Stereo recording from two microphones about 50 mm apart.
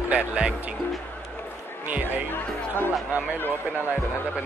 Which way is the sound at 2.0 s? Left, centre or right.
Left.